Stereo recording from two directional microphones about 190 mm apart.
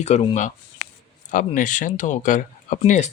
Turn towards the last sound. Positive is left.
turn(degrees=40)  # may be behind; listen again after turning